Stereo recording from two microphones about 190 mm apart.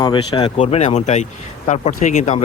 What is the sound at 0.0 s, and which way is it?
Speech, 25° left (ahead or behind).